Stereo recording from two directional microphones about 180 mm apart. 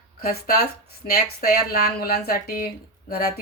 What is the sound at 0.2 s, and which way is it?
Speech, 55° left (ahead or behind).